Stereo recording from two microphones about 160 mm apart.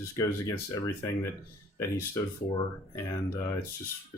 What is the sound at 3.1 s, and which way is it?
Speech, 20° left (ahead or behind).